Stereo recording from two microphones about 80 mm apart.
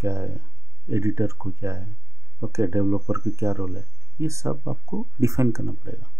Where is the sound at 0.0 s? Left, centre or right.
Right.